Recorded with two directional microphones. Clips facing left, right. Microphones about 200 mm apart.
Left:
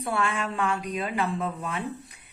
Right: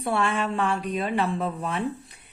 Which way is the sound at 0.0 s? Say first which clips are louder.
Right 3 dB; 30° right (ahead or behind).